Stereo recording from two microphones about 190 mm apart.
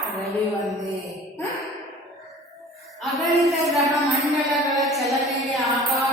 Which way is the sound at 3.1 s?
Centre (ahead or behind).